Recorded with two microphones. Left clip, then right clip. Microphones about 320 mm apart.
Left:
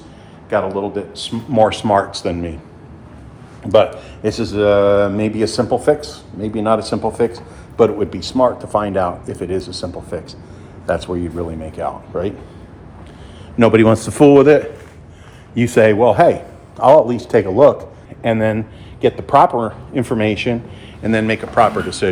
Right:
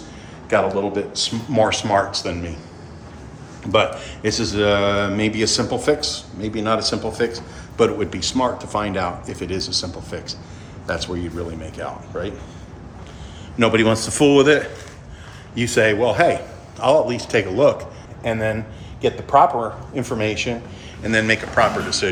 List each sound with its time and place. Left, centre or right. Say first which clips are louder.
0.5 s speech: even; centre
3.7 s speech: left 5 dB; centre
13.6 s speech: left 5 dB; centre